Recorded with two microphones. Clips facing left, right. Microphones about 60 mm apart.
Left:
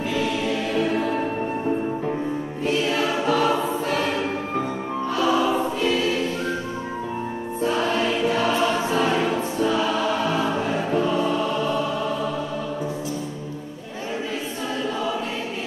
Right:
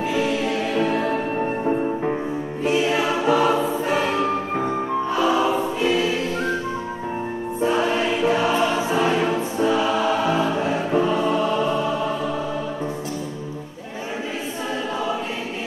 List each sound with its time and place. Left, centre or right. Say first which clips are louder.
0.1 s music: right 1 dB; centre
2.6 s choir: right 2 dB; centre
5.1 s choir: even; centre
7.6 s choir: right 2 dB; centre